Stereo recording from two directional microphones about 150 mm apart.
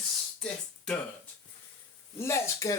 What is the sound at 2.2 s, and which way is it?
Speech, 20° left (ahead or behind).